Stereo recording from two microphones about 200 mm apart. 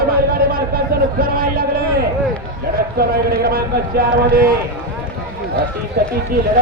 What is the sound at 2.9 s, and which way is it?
Speech, 50° right (ahead or behind).